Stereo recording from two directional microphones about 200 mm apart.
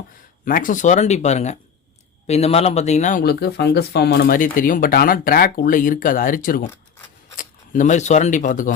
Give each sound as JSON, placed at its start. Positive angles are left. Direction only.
{"t": 0.4, "sound": "speech", "side_deg": 45}